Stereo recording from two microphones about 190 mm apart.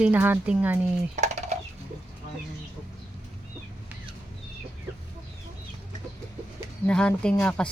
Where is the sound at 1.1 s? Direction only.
40° right (ahead or behind).